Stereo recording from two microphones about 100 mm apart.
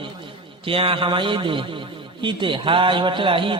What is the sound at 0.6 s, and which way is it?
A man's voice, 65° right (ahead or behind).